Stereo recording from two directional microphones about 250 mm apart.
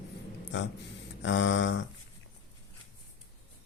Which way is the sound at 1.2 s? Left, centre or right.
Left.